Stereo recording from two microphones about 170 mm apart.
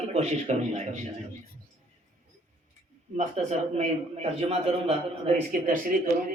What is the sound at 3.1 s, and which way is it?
Speech, 40° right (ahead or behind).